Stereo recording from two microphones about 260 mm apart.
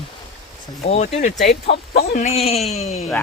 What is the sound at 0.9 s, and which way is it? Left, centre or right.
Speech, left.